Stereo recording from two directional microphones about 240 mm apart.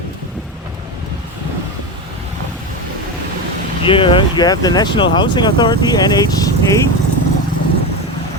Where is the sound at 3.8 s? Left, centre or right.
Left.